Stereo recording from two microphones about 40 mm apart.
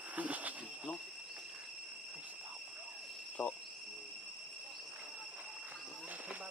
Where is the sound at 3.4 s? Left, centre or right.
Left.